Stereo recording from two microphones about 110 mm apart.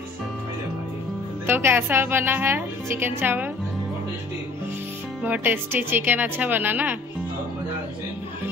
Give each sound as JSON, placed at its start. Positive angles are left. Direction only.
{"t": 1.5, "sound": "a woman's voice", "side_deg": -20}
{"t": 5.2, "sound": "speech", "side_deg": -15}